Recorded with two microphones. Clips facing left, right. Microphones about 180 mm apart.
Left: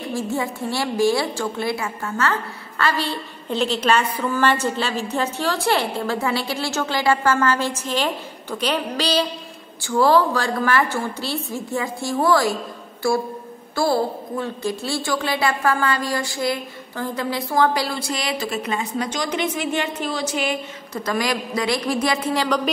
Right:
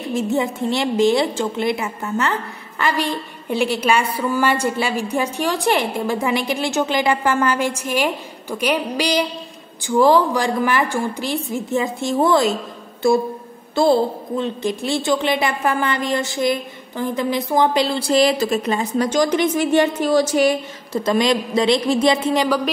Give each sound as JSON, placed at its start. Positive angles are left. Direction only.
{"t": 0.1, "sound": "a woman's voice", "side_deg": -20}
{"t": 20.9, "sound": "a woman's voice", "side_deg": -25}